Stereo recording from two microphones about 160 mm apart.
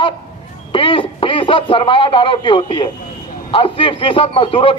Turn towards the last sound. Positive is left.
turn(degrees=35)  # may be behind; listen again after turning